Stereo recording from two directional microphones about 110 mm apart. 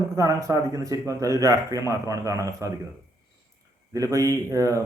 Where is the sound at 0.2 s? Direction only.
30° right (ahead or behind).